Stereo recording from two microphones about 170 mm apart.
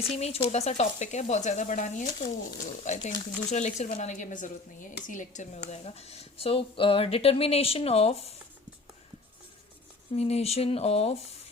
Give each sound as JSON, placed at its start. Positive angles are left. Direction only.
{"t": 0.1, "sound": "speech", "side_deg": 35}
{"t": 10.1, "sound": "speech", "side_deg": 40}